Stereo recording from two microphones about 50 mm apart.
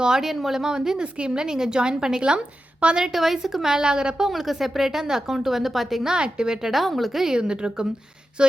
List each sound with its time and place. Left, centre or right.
0.0 s speech: centre
3.1 s speech: centre
4.3 s a woman's voice: centre
6.1 s speech: centre